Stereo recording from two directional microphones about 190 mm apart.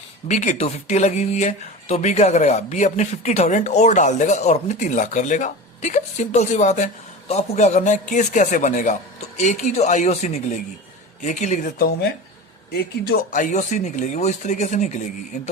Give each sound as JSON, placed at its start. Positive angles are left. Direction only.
{"t": 0.3, "sound": "speech", "side_deg": 35}
{"t": 11.8, "sound": "speech", "side_deg": 55}